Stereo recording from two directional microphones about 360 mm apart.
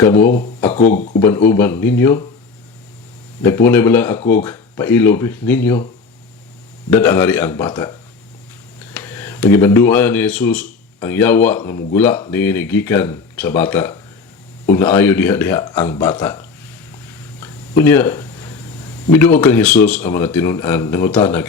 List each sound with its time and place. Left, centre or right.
0.0 s a man's voice: centre
0.3 s speech: left
1.2 s speech: centre
3.4 s a man's voice: centre
6.9 s a man's voice: centre
17.4 s a sound: centre
19.1 s a man's voice: centre